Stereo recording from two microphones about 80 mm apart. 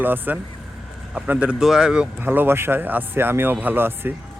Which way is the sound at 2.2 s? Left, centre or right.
Right.